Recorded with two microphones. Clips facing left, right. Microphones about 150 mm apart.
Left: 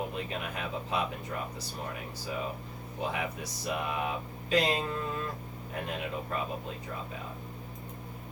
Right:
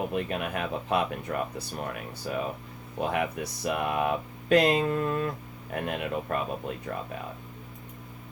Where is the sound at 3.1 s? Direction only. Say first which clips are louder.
Right 7 dB; 60° right (ahead or behind).